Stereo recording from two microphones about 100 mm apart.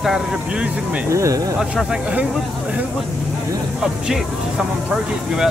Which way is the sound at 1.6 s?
5° right (ahead or behind).